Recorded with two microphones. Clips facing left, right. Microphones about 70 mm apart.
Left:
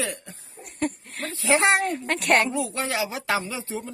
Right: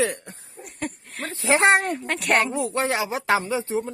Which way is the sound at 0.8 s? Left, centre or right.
Centre.